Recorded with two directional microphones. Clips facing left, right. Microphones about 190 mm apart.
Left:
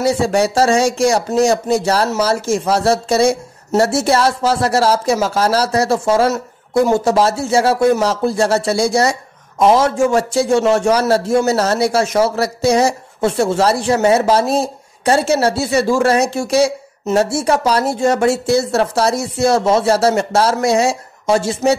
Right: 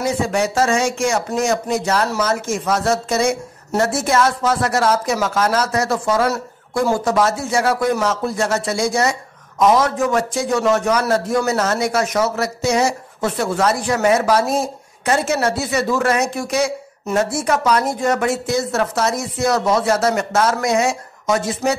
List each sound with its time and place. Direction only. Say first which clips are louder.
0.0 s a man's voice: left 4 dB; 35° left (ahead or behind)